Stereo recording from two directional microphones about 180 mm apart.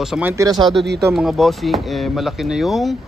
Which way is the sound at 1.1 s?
Centre (ahead or behind).